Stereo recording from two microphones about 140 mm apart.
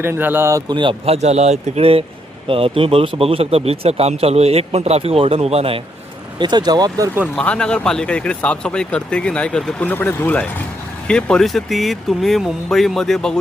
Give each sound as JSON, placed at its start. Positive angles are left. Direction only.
{"t": 0.0, "sound": "speech", "side_deg": -15}
{"t": 0.7, "sound": "speech", "side_deg": -35}
{"t": 6.4, "sound": "speech", "side_deg": -30}
{"t": 7.3, "sound": "speech", "side_deg": 5}